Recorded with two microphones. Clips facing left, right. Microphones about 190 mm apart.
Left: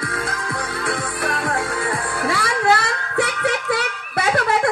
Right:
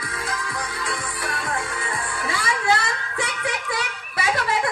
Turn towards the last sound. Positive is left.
turn(degrees=60)  # may be behind; listen again after turning